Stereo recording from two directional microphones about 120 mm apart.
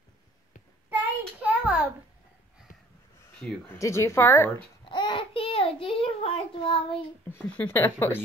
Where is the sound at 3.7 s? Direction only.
25° left (ahead or behind).